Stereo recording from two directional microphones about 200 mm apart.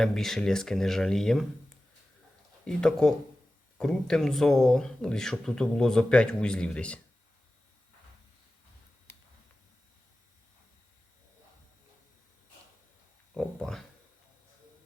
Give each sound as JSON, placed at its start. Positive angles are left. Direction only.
{"t": 0.0, "sound": "speech", "side_deg": 0}
{"t": 2.6, "sound": "speech", "side_deg": 5}
{"t": 13.3, "sound": "a sound", "side_deg": 5}